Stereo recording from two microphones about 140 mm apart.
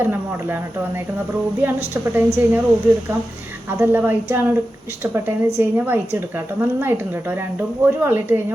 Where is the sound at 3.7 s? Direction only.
15° right (ahead or behind).